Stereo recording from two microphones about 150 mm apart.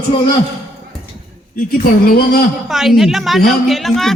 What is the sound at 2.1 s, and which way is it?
Speech, 80° left.